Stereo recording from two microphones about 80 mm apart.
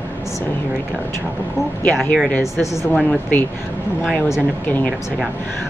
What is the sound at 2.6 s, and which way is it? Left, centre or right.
Speech, left.